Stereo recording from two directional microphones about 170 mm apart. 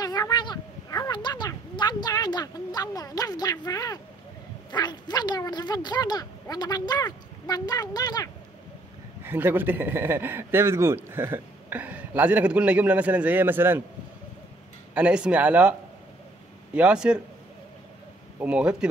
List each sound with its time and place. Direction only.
0.0 s a sound: 20° left (ahead or behind)
4.6 s speech: 25° left (ahead or behind)
9.2 s a man's voice: 10° right (ahead or behind)
15.0 s a man's voice: 5° right (ahead or behind)
16.7 s a man's voice: 5° right (ahead or behind)
18.4 s a man's voice: 5° right (ahead or behind)